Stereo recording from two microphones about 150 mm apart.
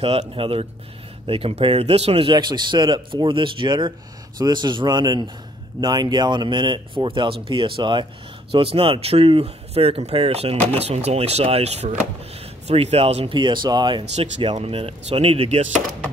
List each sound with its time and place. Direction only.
0.0 s speech: 40° right (ahead or behind)
14.5 s speech: 40° right (ahead or behind)